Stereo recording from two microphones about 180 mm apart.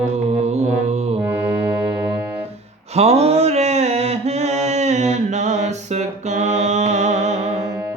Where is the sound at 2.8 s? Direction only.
35° right (ahead or behind).